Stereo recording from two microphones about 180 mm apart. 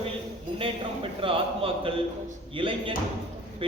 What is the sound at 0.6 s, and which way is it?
A man's voice, 30° right (ahead or behind).